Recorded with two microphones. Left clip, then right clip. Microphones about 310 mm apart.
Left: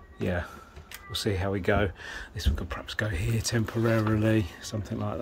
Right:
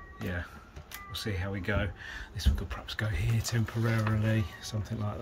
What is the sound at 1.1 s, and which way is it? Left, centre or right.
Speech, centre.